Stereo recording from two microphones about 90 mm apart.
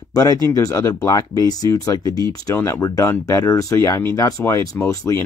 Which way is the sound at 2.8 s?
40° left (ahead or behind).